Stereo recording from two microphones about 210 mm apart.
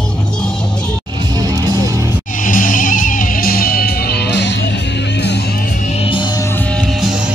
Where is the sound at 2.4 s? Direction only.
40° left (ahead or behind); by 4.6 s 55° left (ahead or behind).